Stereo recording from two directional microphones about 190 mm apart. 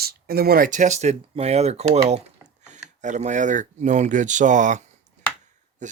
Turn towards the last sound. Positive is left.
turn(degrees=-40)  # may be behind; listen again after turning